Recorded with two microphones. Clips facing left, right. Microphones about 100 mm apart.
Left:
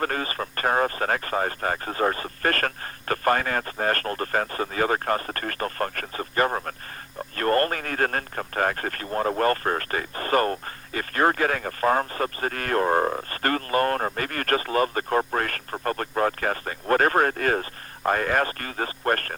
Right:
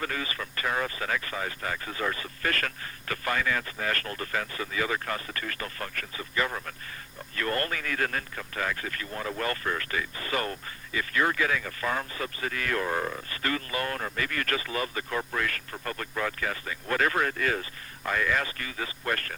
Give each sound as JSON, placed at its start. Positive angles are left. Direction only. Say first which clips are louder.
{"t": 0.0, "sound": "speech", "louder": "left 6 dB", "side_deg": 45}